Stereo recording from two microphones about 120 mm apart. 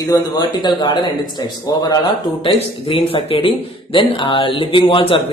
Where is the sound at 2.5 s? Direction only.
50° left (ahead or behind).